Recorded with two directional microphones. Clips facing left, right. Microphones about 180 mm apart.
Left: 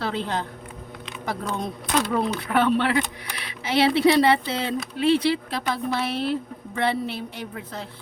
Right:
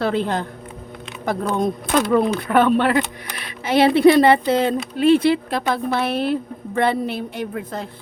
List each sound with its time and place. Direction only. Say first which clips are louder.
0.0 s speech: right 6 dB; 50° right (ahead or behind)